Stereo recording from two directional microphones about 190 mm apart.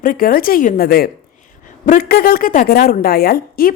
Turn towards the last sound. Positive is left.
turn(degrees=50)  # may be behind; listen again after turning